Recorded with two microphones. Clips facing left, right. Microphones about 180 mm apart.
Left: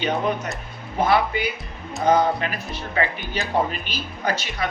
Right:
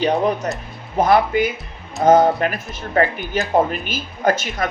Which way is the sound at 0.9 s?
45° right (ahead or behind).